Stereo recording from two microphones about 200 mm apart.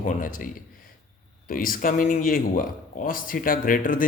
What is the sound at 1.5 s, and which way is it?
Speech, 45° left (ahead or behind).